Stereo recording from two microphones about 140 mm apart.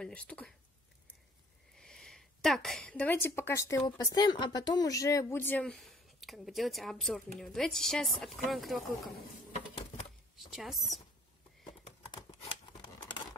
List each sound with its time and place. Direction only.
0.0 s speech: 10° left (ahead or behind)
1.8 s speech: 5° left (ahead or behind)
10.3 s speech: centre (ahead or behind)
11.6 s a sound: 35° left (ahead or behind)